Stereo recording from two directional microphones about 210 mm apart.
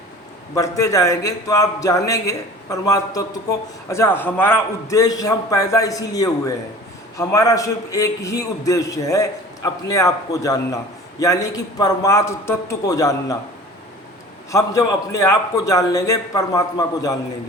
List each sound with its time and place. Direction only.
0.5 s a man's voice: 15° left (ahead or behind)
14.5 s a man's voice: 15° left (ahead or behind)